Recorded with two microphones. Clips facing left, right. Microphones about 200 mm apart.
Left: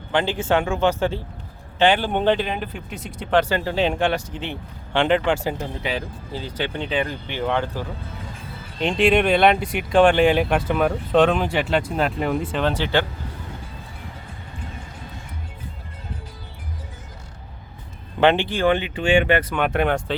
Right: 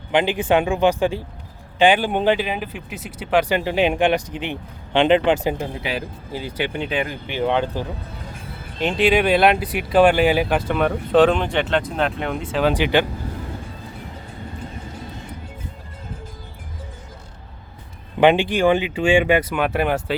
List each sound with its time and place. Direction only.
0.1 s speech: 15° right (ahead or behind)
8.8 s speech: 5° right (ahead or behind)
12.7 s speech: 15° right (ahead or behind)
18.2 s speech: 15° right (ahead or behind)